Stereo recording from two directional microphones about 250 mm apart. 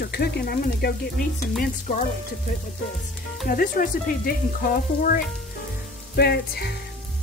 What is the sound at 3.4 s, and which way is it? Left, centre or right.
Speech, left.